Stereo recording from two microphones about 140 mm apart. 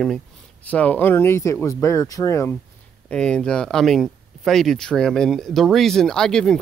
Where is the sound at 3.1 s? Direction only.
5° left (ahead or behind).